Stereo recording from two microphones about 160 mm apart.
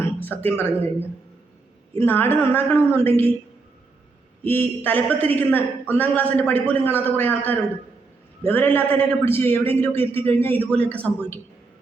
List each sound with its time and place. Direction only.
0.0 s a sound: 10° left (ahead or behind)
2.0 s a man's voice: 15° left (ahead or behind)
4.4 s a man's voice: 10° left (ahead or behind)